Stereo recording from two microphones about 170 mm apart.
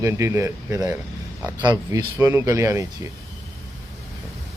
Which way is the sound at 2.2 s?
15° right (ahead or behind).